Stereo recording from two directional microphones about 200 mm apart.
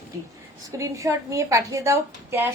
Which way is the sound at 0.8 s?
15° right (ahead or behind).